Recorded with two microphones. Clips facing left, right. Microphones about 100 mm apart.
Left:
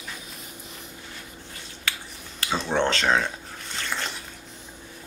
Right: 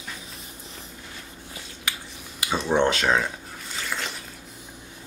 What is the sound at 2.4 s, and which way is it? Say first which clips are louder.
Speech: right 2 dB; 10° right (ahead or behind).